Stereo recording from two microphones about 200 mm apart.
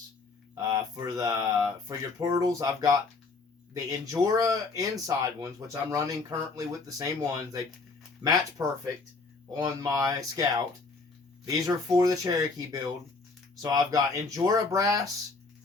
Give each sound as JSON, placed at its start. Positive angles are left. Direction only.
{"t": 0.5, "sound": "speech", "side_deg": -15}
{"t": 11.4, "sound": "speech", "side_deg": -15}